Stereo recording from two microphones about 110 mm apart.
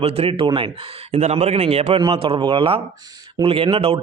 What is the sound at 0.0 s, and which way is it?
A man's voice, 65° right (ahead or behind).